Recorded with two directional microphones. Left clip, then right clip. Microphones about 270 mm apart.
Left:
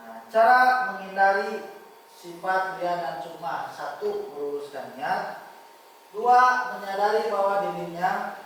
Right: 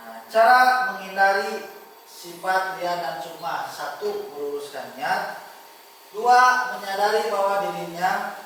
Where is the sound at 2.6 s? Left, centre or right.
Centre.